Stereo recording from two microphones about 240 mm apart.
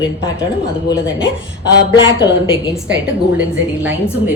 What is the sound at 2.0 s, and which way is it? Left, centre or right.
Speech, left.